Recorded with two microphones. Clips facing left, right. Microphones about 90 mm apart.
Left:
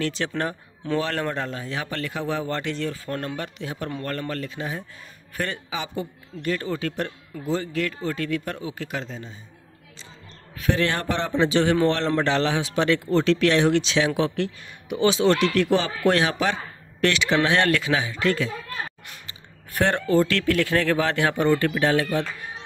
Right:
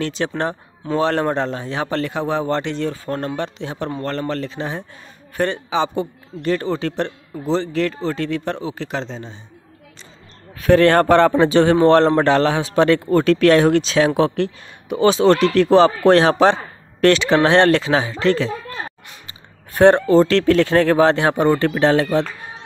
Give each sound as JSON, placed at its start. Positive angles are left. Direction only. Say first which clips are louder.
{"t": 0.0, "sound": "a man's voice", "louder": "right 4 dB", "side_deg": -25}
{"t": 10.5, "sound": "a man's voice", "louder": "right 11 dB", "side_deg": -45}
{"t": 19.7, "sound": "a man's voice", "louder": "right 9 dB", "side_deg": -25}